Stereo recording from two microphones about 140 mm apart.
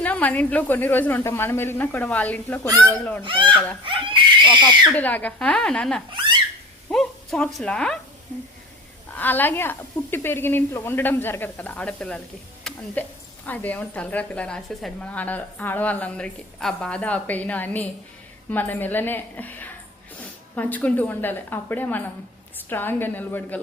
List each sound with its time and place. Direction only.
0.0 s a woman's voice: 10° left (ahead or behind)
3.2 s speech: 40° right (ahead or behind)
3.5 s a woman's voice: 10° left (ahead or behind)
3.8 s speech: 35° right (ahead or behind)
4.9 s a woman's voice: 10° left (ahead or behind)
9.1 s a woman's voice: 15° left (ahead or behind)